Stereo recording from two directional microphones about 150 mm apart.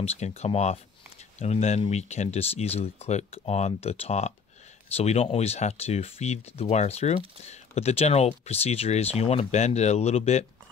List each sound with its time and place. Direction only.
0.0 s speech: 45° left (ahead or behind)